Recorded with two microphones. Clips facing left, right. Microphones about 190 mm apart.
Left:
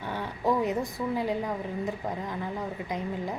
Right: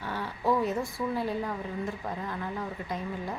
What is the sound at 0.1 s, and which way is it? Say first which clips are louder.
Speech: left 1 dB; 15° left (ahead or behind).